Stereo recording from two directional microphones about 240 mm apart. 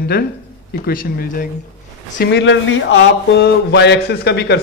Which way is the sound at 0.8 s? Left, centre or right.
Left.